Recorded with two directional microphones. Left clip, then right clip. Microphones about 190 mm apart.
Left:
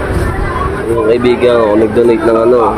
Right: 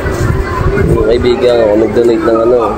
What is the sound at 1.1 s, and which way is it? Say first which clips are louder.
Speech: left 1 dB; 15° left (ahead or behind).